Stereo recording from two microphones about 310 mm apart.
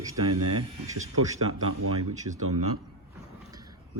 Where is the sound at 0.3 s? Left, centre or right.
Right.